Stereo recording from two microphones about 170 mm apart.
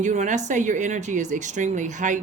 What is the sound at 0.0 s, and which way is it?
A woman's voice, 45° right (ahead or behind).